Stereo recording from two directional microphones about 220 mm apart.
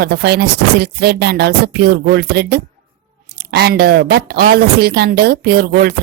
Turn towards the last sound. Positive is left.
turn(degrees=-45)  # may be behind; listen again after turning